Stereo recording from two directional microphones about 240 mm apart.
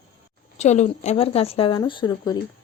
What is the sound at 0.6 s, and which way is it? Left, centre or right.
Speech, left.